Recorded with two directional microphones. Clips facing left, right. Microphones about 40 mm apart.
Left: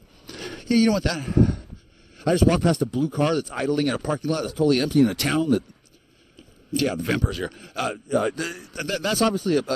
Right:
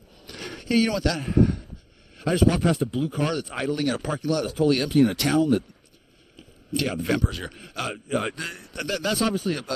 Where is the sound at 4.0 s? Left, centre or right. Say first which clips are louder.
Left 3 dB; right.